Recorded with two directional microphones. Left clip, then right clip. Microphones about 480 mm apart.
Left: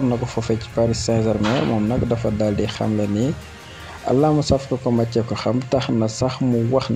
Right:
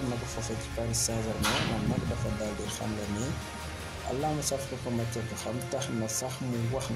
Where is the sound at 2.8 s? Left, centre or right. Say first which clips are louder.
Left 13 dB; right.